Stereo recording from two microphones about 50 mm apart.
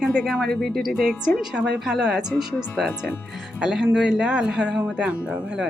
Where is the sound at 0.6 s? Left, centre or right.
Centre.